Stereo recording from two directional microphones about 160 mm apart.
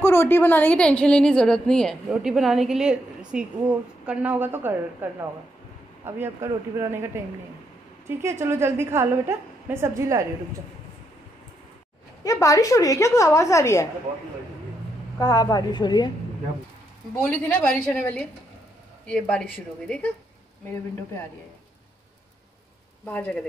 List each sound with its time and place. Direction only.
0.0 s a woman's voice: 15° left (ahead or behind); by 7.1 s 15° right (ahead or behind)
8.2 s a woman's voice: 15° right (ahead or behind)
12.2 s a woman's voice: 20° left (ahead or behind)
15.1 s a woman's voice: 25° left (ahead or behind)
17.1 s a woman's voice: 10° left (ahead or behind)
23.0 s a woman's voice: 10° left (ahead or behind)